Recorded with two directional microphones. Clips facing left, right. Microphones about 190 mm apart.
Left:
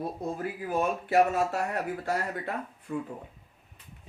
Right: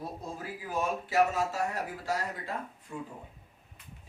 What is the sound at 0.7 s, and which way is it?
Speech, 55° left (ahead or behind).